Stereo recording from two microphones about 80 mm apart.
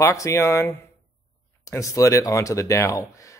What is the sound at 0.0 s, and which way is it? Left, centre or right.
Speech, left.